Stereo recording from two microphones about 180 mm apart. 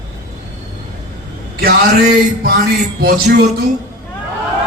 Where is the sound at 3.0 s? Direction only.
55° right (ahead or behind).